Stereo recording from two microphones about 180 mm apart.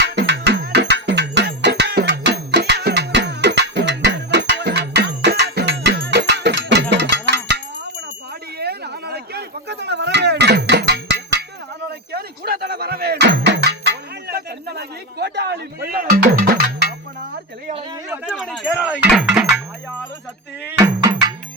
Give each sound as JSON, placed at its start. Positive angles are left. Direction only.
{"t": 0.0, "sound": "music", "side_deg": -70}
{"t": 6.9, "sound": "a sound", "side_deg": -75}
{"t": 12.1, "sound": "music", "side_deg": -60}
{"t": 18.1, "sound": "a sound", "side_deg": -5}
{"t": 18.8, "sound": "music", "side_deg": -5}
{"t": 20.7, "sound": "music", "side_deg": -15}